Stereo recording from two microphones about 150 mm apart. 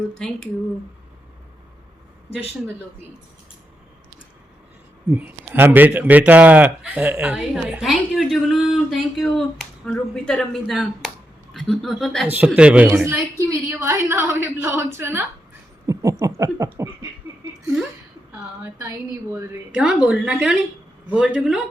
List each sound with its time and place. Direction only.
0.2 s speech: 5° left (ahead or behind)
5.1 s a man's voice: 15° right (ahead or behind)
15.9 s a sound: 20° right (ahead or behind)
18.3 s a man's voice: 15° right (ahead or behind)
19.8 s speech: 5° right (ahead or behind)